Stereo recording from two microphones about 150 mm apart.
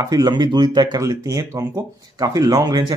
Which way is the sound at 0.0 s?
25° right (ahead or behind).